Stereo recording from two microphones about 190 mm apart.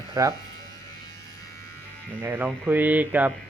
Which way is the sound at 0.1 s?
20° right (ahead or behind).